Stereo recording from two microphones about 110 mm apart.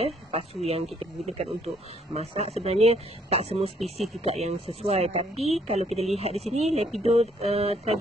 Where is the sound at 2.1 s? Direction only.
75° right (ahead or behind).